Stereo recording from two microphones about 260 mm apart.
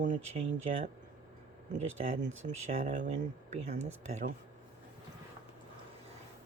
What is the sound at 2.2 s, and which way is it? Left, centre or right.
Speech, right.